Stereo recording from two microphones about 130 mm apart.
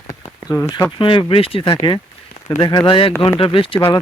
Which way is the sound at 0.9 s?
40° left (ahead or behind).